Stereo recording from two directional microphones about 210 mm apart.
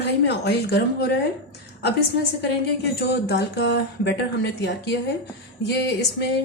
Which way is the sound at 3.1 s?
55° left (ahead or behind).